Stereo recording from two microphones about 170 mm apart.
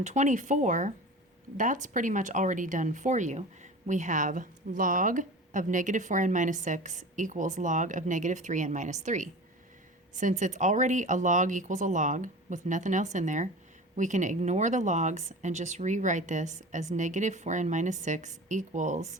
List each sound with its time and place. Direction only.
0.0 s speech: 45° right (ahead or behind)